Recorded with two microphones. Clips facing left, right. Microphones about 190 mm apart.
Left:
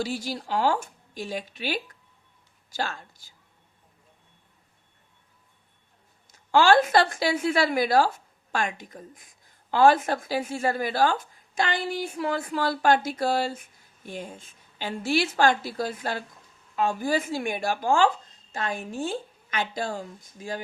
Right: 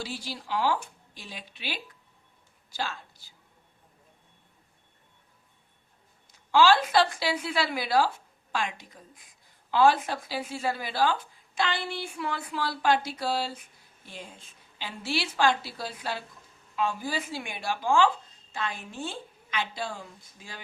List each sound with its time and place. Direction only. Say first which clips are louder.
0.0 s a woman's voice: left 7 dB; 45° left (ahead or behind)
6.5 s a woman's voice: left 3 dB; 50° left (ahead or behind)